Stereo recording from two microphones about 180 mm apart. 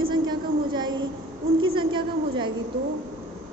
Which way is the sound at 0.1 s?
25° right (ahead or behind).